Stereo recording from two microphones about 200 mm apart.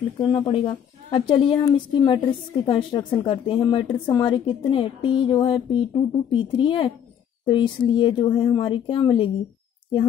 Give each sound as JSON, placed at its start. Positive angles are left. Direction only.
{"t": 0.2, "sound": "a woman's voice", "side_deg": 25}